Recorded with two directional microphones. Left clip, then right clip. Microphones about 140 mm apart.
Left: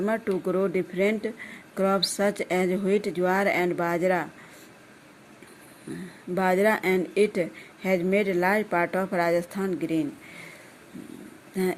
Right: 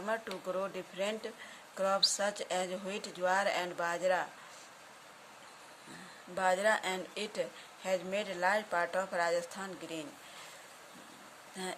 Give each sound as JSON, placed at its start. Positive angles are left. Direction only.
{"t": 0.0, "sound": "a woman's voice", "side_deg": 35}
{"t": 6.3, "sound": "a woman's voice", "side_deg": 40}